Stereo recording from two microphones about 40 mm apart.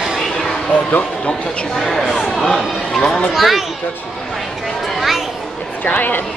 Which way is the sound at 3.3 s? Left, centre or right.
Centre.